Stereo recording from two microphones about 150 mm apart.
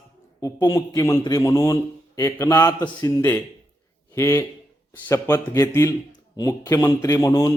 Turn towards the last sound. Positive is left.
turn(degrees=20)  # may be behind; listen again after turning